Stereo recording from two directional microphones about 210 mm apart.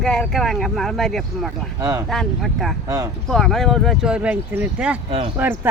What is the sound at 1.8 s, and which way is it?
Speech, 15° right (ahead or behind).